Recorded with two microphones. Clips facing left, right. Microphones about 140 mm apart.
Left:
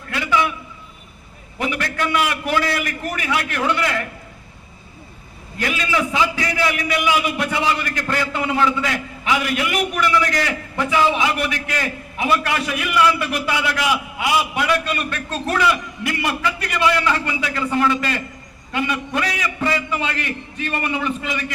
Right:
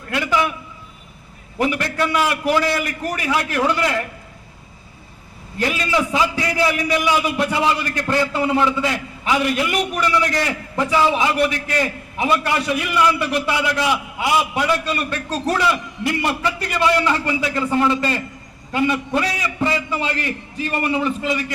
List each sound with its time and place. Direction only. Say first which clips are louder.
0.1 s a man's voice: even; 45° right (ahead or behind)
1.5 s a man's voice: right 3 dB; 35° right (ahead or behind)
5.5 s a man's voice: right 2 dB; 35° right (ahead or behind)
8.0 s a man's voice: right 5 dB; 20° right (ahead or behind)
8.3 s a man's voice: right 1 dB; 35° right (ahead or behind)